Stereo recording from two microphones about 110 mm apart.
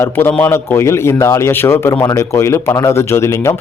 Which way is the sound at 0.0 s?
20° left (ahead or behind).